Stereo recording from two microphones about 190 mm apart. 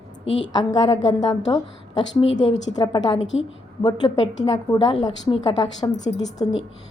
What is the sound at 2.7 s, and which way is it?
Speech, 25° left (ahead or behind).